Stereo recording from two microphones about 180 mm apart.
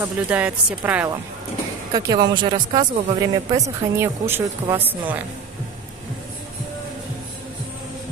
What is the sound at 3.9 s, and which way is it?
Speech, 15° right (ahead or behind).